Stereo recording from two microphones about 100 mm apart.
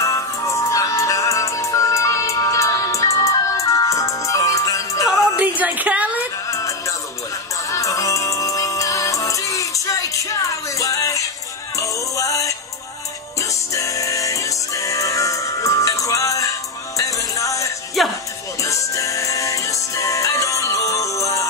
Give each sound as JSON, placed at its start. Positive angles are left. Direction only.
{"t": 0.0, "sound": "music", "side_deg": 30}
{"t": 5.4, "sound": "a sound", "side_deg": -15}
{"t": 6.5, "sound": "music", "side_deg": 30}
{"t": 18.0, "sound": "music", "side_deg": 0}
{"t": 18.6, "sound": "music", "side_deg": 30}